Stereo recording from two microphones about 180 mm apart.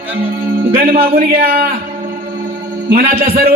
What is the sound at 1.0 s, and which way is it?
Speech, 55° right (ahead or behind).